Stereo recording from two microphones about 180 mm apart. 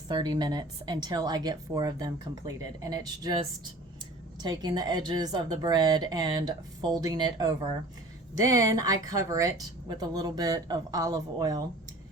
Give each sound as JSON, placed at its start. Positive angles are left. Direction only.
{"t": 0.1, "sound": "speech", "side_deg": -25}
{"t": 4.4, "sound": "speech", "side_deg": -25}